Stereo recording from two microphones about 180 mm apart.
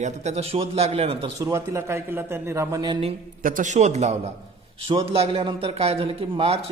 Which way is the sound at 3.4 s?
45° right (ahead or behind).